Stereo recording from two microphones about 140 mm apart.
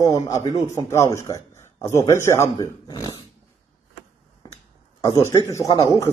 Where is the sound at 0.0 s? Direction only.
25° left (ahead or behind).